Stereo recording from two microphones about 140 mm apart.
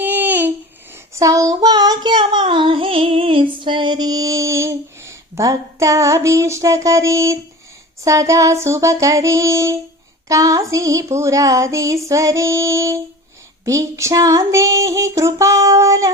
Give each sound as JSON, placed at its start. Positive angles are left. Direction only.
{"t": 0.0, "sound": "babbling", "side_deg": -15}
{"t": 1.1, "sound": "child singing", "side_deg": -25}
{"t": 3.6, "sound": "a sound", "side_deg": -35}